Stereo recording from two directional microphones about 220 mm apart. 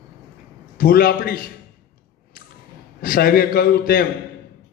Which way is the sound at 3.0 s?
40° left (ahead or behind).